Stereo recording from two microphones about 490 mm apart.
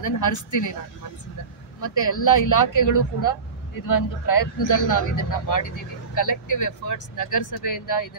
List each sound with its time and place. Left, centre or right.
0.0 s speech: left
1.8 s speech: left